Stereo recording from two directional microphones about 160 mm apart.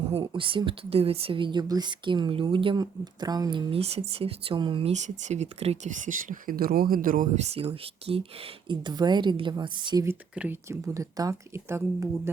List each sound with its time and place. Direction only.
0.1 s speech: 30° right (ahead or behind)
3.7 s speech: 40° right (ahead or behind)
10.1 s speech: 10° right (ahead or behind)